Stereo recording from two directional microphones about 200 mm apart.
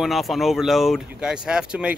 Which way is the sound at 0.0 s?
Centre (ahead or behind).